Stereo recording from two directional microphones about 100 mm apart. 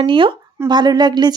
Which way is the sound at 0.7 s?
45° right (ahead or behind).